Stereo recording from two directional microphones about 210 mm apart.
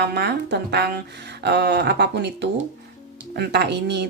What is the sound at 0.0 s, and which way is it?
Speech, 50° right (ahead or behind).